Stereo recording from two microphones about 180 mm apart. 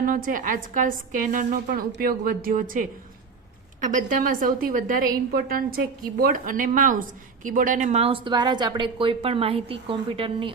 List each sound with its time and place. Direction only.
0.3 s a woman's voice: 50° right (ahead or behind)
3.8 s a woman's voice: 45° right (ahead or behind); by 10.5 s 30° right (ahead or behind)